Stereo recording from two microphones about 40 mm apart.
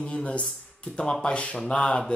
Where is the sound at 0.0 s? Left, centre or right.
Left.